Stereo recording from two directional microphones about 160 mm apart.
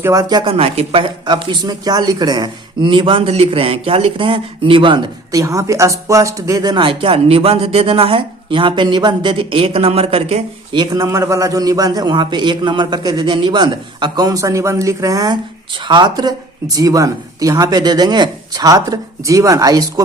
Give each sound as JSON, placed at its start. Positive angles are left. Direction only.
{"t": 0.0, "sound": "a man's voice", "side_deg": -20}
{"t": 0.5, "sound": "speech", "side_deg": -40}
{"t": 11.0, "sound": "a man's voice", "side_deg": -20}